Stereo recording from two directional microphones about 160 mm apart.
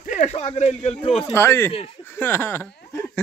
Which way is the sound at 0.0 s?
50° left (ahead or behind).